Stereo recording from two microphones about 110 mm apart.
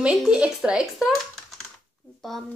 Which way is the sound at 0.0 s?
5° right (ahead or behind).